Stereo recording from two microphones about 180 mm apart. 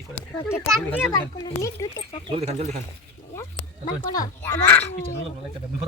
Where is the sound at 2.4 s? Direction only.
35° right (ahead or behind).